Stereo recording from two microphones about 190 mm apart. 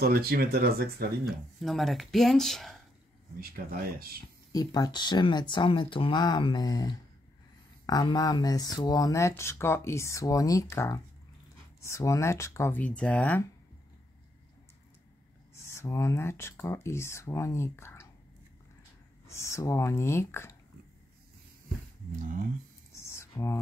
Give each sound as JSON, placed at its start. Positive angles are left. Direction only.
{"t": 0.0, "sound": "speech", "side_deg": -50}
{"t": 1.2, "sound": "speech", "side_deg": 0}
{"t": 3.3, "sound": "speech", "side_deg": -50}
{"t": 4.5, "sound": "speech", "side_deg": 20}
{"t": 15.6, "sound": "speech", "side_deg": 15}
{"t": 19.2, "sound": "speech", "side_deg": 15}
{"t": 23.0, "sound": "a sound", "side_deg": 15}